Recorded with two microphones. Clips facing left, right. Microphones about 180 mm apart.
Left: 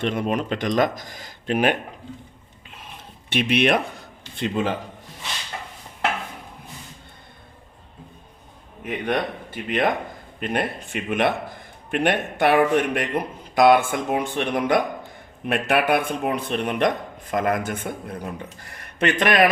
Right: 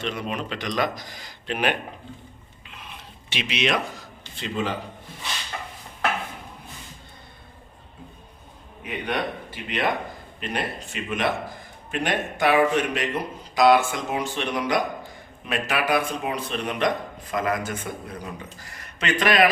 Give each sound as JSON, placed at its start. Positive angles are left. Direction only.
{"t": 0.0, "sound": "speech", "side_deg": 50}
{"t": 2.6, "sound": "a sound", "side_deg": 45}
{"t": 8.8, "sound": "a man's voice", "side_deg": 50}